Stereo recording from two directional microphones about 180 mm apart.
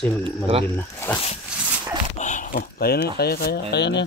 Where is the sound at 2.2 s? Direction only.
45° left (ahead or behind); by 4.0 s 75° left (ahead or behind).